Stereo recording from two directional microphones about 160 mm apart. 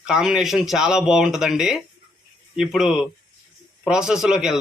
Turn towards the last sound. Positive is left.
turn(degrees=-5)  # may be behind; listen again after turning